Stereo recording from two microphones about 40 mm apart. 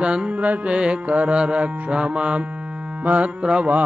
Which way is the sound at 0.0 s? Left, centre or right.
Right.